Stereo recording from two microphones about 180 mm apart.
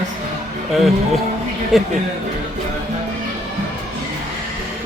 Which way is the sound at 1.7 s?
Centre (ahead or behind).